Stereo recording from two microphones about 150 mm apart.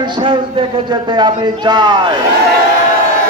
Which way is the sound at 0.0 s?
30° right (ahead or behind).